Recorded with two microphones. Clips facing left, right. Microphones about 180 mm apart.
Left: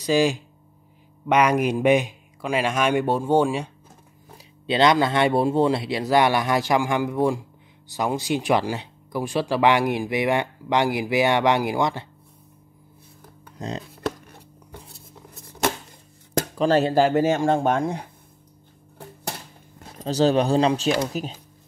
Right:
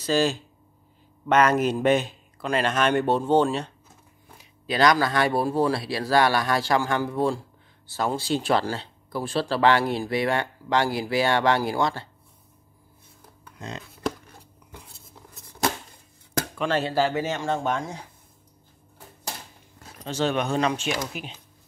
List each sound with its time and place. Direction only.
0.0 s speech: 15° left (ahead or behind)
4.4 s speech: 25° left (ahead or behind)
13.6 s speech: 35° left (ahead or behind)
16.5 s speech: 40° left (ahead or behind); by 18.1 s 55° left (ahead or behind)
20.0 s speech: 35° left (ahead or behind)